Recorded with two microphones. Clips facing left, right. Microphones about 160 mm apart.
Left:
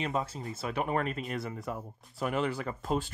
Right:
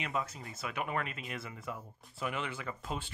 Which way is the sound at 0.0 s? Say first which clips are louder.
Left 5 dB; 30° left (ahead or behind).